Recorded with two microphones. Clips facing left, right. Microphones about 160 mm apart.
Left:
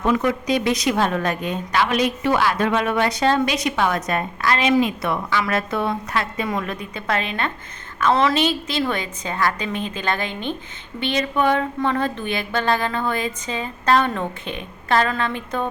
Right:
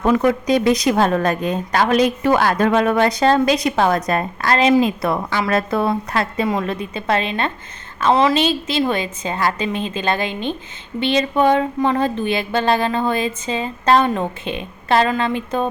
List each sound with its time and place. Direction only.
0.0 s a woman's voice: 40° right (ahead or behind); by 15.7 s 20° right (ahead or behind)